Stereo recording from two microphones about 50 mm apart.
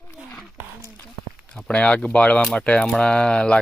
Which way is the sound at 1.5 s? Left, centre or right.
Left.